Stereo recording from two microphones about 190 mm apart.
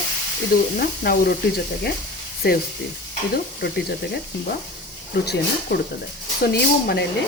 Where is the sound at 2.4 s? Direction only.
55° left (ahead or behind).